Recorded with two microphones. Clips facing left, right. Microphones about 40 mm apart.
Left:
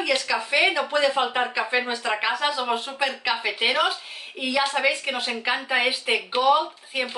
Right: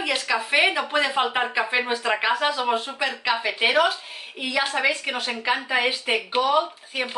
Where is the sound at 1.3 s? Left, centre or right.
Centre.